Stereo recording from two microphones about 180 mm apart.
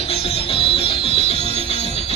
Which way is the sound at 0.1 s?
30° left (ahead or behind).